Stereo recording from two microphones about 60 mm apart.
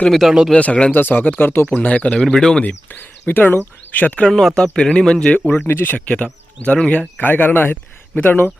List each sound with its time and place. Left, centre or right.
0.1 s speech: centre
0.5 s speech: centre
0.9 s speech: left
2.2 s speech: centre
2.6 s speech: left
4.3 s speech: centre
5.6 s speech: left
6.7 s speech: centre
7.2 s speech: left